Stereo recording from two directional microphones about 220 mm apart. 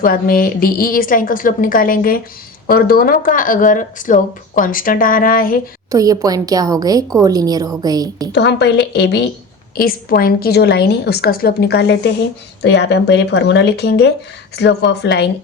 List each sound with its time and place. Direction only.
0.0 s speech: 40° left (ahead or behind)
5.9 s a woman's voice: 15° right (ahead or behind)
8.3 s a woman's voice: 50° left (ahead or behind)